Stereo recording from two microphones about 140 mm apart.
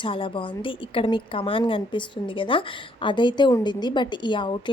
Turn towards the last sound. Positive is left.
turn(degrees=35)  # may be behind; listen again after turning